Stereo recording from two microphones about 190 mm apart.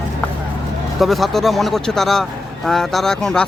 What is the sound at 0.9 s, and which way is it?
A man's voice, centre (ahead or behind).